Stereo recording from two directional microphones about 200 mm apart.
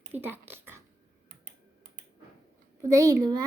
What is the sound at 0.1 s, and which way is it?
Speech, 10° right (ahead or behind).